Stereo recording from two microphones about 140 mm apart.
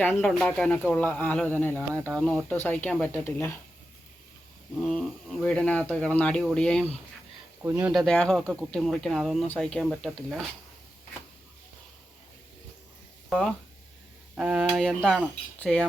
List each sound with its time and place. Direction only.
0.0 s speech: 10° left (ahead or behind)
1.7 s speech: 20° right (ahead or behind)
2.2 s speech: 5° left (ahead or behind)
4.8 s speech: 5° left (ahead or behind)
7.6 s speech: 20° right (ahead or behind)
7.9 s speech: centre (ahead or behind)
14.3 s speech: 5° right (ahead or behind)